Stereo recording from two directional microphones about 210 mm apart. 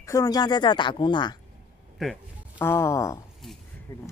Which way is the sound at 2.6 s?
10° left (ahead or behind).